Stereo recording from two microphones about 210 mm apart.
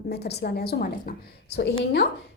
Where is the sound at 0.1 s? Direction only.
50° left (ahead or behind).